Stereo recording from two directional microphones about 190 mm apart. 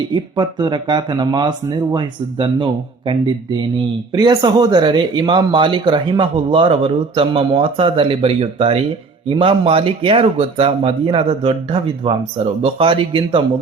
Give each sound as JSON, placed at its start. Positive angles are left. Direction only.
{"t": 0.1, "sound": "speech", "side_deg": -25}
{"t": 3.8, "sound": "speech", "side_deg": -20}